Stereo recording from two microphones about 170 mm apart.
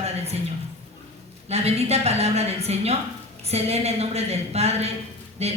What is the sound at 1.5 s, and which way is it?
A woman's voice, 40° right (ahead or behind).